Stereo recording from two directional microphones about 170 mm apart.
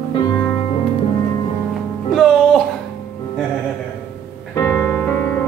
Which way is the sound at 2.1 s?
Centre (ahead or behind).